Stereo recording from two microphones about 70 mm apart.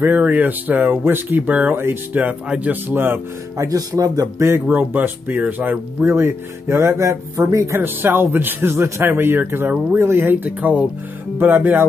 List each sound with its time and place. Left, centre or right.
0.0 s speech: right
2.2 s speech: centre
3.5 s speech: right
4.4 s speech: right
4.7 s speech: right
6.0 s speech: right
7.8 s speech: right